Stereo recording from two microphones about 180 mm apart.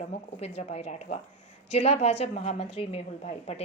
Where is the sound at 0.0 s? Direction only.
35° left (ahead or behind).